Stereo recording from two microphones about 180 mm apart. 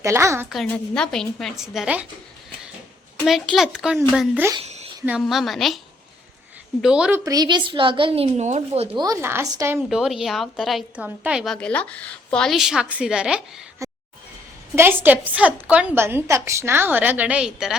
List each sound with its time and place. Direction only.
0.0 s a woman's voice: 15° right (ahead or behind)
0.7 s a woman's voice: 5° left (ahead or behind)
3.2 s a woman's voice: centre (ahead or behind)
4.6 s a sound: 35° right (ahead or behind)
5.0 s a woman's voice: 5° right (ahead or behind)
6.8 s a woman's voice: 5° right (ahead or behind)
7.3 s a woman's voice: 25° right (ahead or behind)
9.0 s a woman's voice: 15° right (ahead or behind)
9.9 s a woman's voice: 5° right (ahead or behind)
13.8 s a sound: 15° right (ahead or behind)
14.8 s a woman's voice: 10° right (ahead or behind)